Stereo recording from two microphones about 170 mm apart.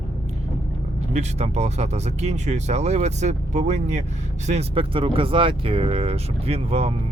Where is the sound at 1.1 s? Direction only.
40° right (ahead or behind).